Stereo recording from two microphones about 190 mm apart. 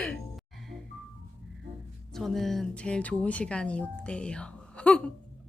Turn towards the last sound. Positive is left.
turn(degrees=5)  # may be behind; listen again after turning